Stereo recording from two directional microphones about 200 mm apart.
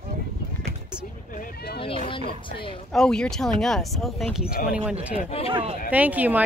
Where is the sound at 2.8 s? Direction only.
5° left (ahead or behind).